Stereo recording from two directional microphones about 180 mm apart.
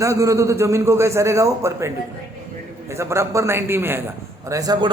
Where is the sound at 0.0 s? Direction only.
15° right (ahead or behind).